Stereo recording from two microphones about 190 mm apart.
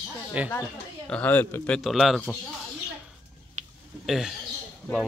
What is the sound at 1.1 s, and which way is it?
Speech, 10° left (ahead or behind).